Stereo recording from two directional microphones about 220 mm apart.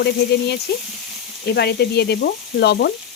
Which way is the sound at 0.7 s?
45° left (ahead or behind).